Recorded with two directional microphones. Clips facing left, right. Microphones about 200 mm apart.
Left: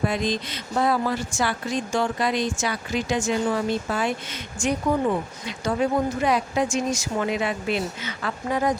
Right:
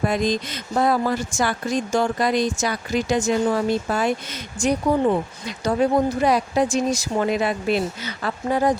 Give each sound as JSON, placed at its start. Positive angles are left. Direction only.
{"t": 0.0, "sound": "speech", "side_deg": -45}